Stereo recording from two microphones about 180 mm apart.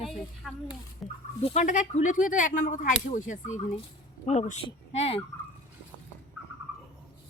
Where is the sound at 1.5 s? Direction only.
45° left (ahead or behind).